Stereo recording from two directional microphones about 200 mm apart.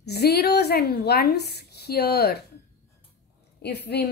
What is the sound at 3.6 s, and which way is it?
Speech, 55° left (ahead or behind).